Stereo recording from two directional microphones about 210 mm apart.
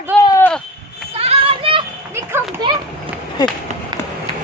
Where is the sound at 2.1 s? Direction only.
10° right (ahead or behind).